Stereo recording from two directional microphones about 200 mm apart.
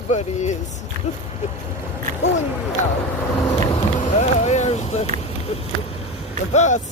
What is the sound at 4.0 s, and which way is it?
Vehicle, 35° left (ahead or behind).